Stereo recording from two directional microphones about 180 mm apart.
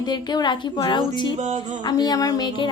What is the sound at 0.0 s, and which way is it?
Speech, 25° left (ahead or behind).